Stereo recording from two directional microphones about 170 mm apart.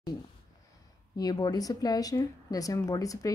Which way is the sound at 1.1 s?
25° left (ahead or behind).